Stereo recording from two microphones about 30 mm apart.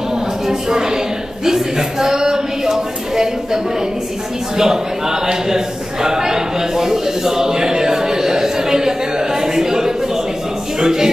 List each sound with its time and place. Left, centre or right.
0.5 s a woman's voice: centre